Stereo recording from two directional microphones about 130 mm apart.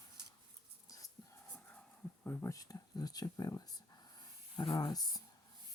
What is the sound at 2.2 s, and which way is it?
Speech, 25° left (ahead or behind).